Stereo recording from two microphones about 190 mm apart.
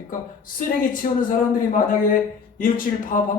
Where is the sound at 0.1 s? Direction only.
45° left (ahead or behind).